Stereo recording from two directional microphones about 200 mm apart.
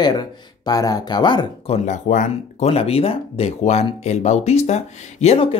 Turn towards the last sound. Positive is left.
turn(degrees=30)  # may be behind; listen again after turning